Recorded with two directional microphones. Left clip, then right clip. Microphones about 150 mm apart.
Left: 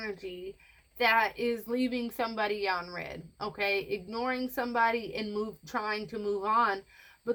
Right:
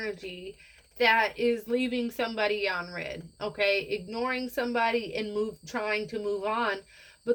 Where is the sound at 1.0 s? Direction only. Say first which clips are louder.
Right 3 dB; 25° left (ahead or behind).